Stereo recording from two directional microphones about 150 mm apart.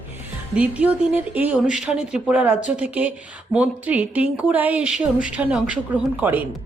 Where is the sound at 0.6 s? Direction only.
10° right (ahead or behind).